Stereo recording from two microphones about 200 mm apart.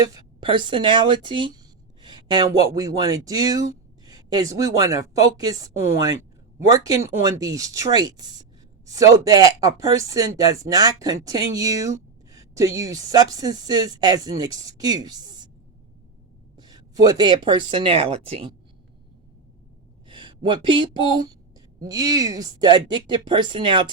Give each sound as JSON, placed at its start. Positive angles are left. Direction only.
{"t": 0.0, "sound": "speech", "side_deg": -20}
{"t": 16.6, "sound": "speech", "side_deg": -20}
{"t": 20.1, "sound": "speech", "side_deg": -25}